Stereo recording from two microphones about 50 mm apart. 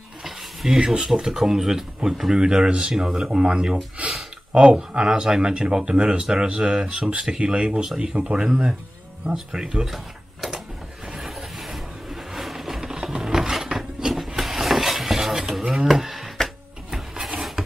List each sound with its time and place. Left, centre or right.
0.2 s speech: centre
4.0 s a sound: right
4.6 s speech: centre
11.1 s vehicle: centre
15.9 s a sound: centre
17.4 s rub: centre